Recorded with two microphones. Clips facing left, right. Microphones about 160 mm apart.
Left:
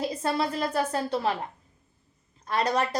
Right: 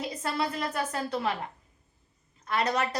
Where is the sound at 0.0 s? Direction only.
30° left (ahead or behind).